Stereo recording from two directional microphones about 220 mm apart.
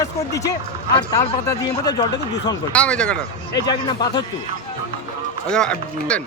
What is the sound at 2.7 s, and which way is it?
Speech, 5° left (ahead or behind).